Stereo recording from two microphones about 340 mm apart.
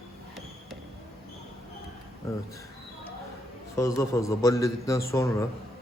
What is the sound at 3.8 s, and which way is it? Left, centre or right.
A man's voice, centre.